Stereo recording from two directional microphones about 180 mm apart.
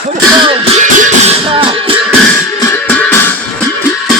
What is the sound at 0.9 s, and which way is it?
Music, 45° right (ahead or behind).